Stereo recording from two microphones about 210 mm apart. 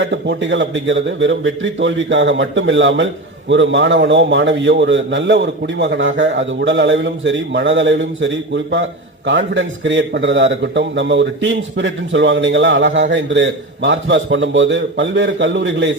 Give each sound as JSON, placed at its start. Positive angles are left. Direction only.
{"t": 0.0, "sound": "a man's voice", "side_deg": -60}